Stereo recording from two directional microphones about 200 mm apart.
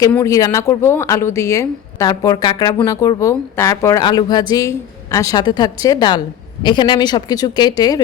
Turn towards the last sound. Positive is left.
turn(degrees=20)  # may be behind; listen again after turning